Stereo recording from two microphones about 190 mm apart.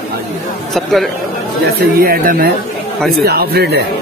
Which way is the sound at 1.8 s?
50° right (ahead or behind).